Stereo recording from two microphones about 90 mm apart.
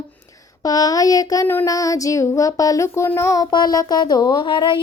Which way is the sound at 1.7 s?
40° left (ahead or behind).